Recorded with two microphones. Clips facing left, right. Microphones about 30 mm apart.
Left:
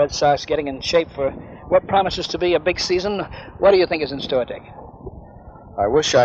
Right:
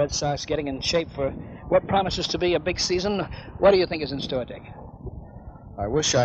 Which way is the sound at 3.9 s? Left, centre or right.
Left.